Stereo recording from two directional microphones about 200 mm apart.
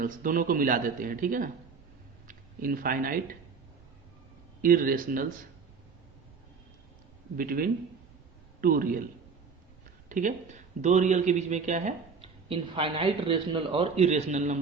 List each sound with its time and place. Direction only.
0.0 s speech: 45° right (ahead or behind)
2.2 s a sound: 45° right (ahead or behind)
4.6 s speech: 45° right (ahead or behind)
7.3 s speech: 45° right (ahead or behind)
10.1 s speech: 40° right (ahead or behind)